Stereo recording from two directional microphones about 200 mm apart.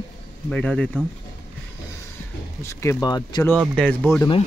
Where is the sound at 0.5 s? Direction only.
5° left (ahead or behind).